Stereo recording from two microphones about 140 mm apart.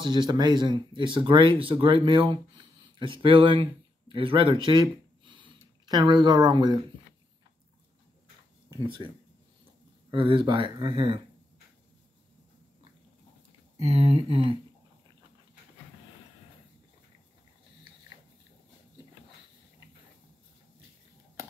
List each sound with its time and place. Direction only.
0.0 s speech: 30° right (ahead or behind)
8.6 s speech: 35° right (ahead or behind)
10.1 s speech: 40° right (ahead or behind)
13.7 s speech: 50° right (ahead or behind)